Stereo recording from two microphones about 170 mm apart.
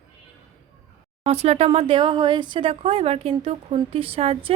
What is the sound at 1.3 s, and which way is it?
Speech, 40° right (ahead or behind).